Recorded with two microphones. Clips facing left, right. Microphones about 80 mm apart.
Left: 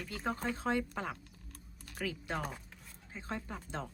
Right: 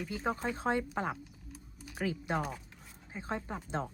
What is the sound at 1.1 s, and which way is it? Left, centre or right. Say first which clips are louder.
Typing: right 5 dB; centre.